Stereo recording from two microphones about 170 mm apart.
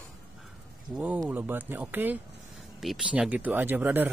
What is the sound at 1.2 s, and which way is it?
Speech, 10° right (ahead or behind).